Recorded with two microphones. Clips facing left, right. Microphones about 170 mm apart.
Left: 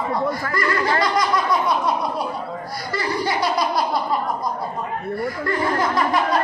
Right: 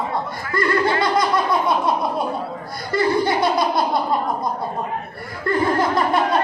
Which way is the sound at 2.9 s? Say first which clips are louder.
Right 6 dB; 50° right (ahead or behind).